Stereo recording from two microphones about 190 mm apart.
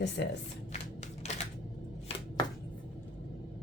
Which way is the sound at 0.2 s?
65° left (ahead or behind).